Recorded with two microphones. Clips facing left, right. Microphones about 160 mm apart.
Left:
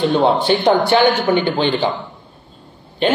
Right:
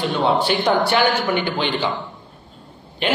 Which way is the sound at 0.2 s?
30° left (ahead or behind).